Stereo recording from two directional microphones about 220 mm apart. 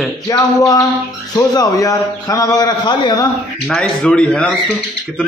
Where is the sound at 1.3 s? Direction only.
15° left (ahead or behind).